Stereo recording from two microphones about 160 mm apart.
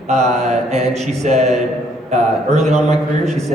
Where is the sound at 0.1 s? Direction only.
45° right (ahead or behind).